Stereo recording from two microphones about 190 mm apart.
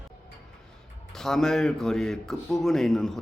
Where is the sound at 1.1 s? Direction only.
Centre (ahead or behind).